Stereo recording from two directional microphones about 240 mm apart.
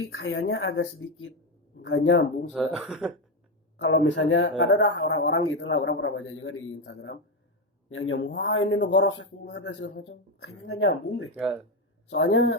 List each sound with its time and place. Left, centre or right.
0.0 s speech: left
2.5 s speech: centre
3.8 s speech: left